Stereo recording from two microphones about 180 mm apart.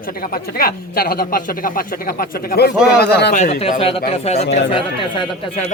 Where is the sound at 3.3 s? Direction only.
40° left (ahead or behind).